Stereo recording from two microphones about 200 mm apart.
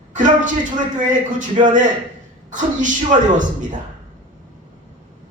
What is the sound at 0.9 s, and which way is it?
A man's voice, 40° right (ahead or behind).